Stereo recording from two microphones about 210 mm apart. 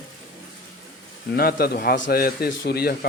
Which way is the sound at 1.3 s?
45° left (ahead or behind).